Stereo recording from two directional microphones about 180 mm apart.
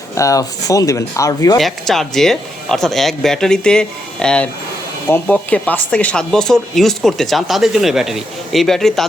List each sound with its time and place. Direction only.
0.2 s speech: 20° left (ahead or behind)
1.5 s speech: centre (ahead or behind)